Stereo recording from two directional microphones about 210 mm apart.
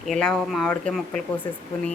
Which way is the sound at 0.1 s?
5° left (ahead or behind).